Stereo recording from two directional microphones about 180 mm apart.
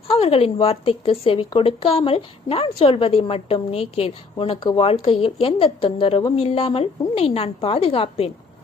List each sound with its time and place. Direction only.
0.1 s speech: 30° left (ahead or behind)